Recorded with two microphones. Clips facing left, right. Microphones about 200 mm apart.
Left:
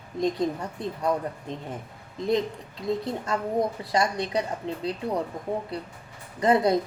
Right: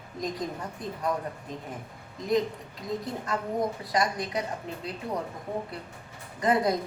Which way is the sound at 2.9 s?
30° left (ahead or behind).